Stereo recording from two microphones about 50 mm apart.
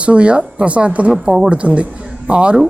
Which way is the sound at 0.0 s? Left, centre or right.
Right.